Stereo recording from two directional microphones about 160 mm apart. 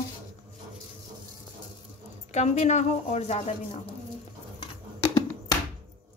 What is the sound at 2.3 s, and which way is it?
A woman's voice, 45° left (ahead or behind).